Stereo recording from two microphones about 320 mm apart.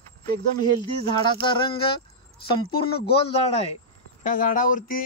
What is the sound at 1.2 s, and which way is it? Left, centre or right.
Speech, centre.